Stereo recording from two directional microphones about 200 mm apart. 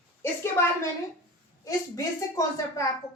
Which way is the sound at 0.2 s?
15° left (ahead or behind).